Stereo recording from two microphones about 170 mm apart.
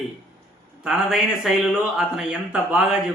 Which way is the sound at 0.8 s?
Centre (ahead or behind).